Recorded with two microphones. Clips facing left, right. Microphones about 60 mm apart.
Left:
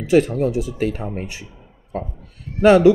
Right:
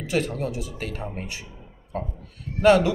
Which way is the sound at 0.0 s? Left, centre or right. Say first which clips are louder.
Left 10 dB; left.